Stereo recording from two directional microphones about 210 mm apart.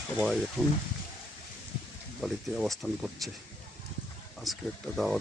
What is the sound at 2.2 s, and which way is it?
Speech, centre (ahead or behind).